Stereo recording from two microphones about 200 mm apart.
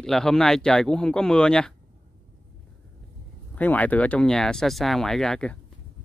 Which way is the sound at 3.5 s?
10° left (ahead or behind).